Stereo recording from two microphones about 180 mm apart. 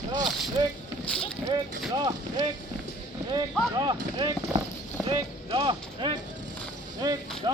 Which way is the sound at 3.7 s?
25° right (ahead or behind).